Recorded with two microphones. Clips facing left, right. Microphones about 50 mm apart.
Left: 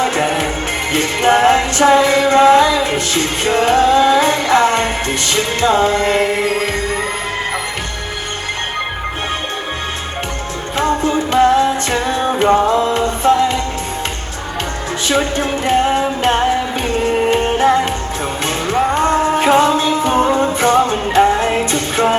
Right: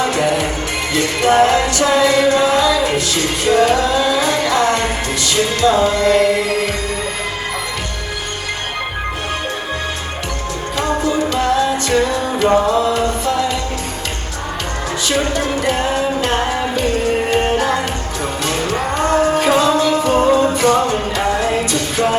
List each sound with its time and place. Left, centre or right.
0.0 s music: left
10.8 s music: left
15.0 s music: left